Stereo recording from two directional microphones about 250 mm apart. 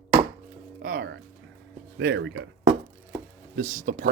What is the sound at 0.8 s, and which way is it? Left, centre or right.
Speech, right.